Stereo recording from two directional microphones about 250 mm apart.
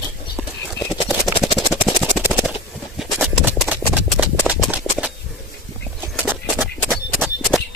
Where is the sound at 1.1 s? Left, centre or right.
Centre.